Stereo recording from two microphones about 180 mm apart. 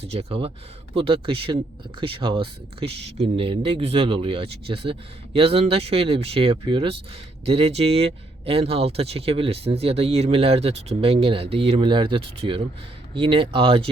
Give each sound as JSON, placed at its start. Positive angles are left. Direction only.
{"t": 0.0, "sound": "speech", "side_deg": -35}